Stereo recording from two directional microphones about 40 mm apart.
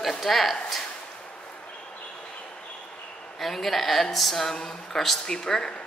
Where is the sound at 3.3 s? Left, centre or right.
Centre.